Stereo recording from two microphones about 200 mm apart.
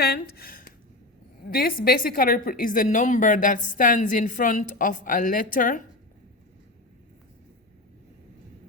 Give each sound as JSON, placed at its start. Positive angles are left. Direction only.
{"t": 0.0, "sound": "a woman's voice", "side_deg": 50}